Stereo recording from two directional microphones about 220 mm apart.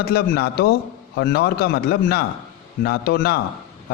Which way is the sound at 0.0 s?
45° left (ahead or behind).